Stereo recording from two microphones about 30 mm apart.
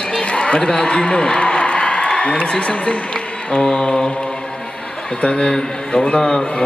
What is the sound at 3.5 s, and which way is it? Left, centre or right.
Mantra, centre.